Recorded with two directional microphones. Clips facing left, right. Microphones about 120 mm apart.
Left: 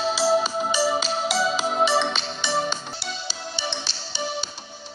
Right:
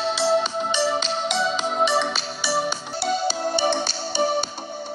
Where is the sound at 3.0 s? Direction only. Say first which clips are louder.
Right 11 dB; 50° right (ahead or behind).